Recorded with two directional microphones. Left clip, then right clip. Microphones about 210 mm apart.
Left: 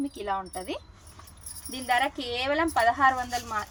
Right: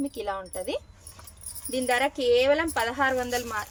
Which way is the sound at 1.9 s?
45° right (ahead or behind).